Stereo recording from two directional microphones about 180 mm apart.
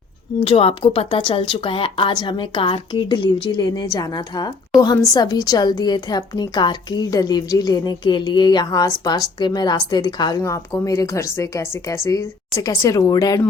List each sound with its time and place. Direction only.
0.3 s a woman's voice: 30° left (ahead or behind)